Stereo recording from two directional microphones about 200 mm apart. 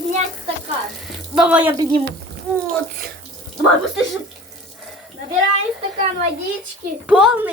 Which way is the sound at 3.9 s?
Centre (ahead or behind).